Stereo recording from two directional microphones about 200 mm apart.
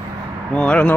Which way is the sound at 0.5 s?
5° left (ahead or behind).